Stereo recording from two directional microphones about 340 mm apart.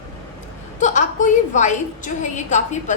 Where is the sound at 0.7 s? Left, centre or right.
Left.